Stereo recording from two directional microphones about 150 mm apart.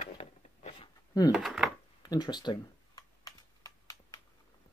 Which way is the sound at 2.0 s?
30° left (ahead or behind).